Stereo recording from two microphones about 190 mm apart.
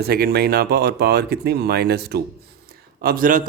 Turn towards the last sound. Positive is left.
turn(degrees=-45)  # may be behind; listen again after turning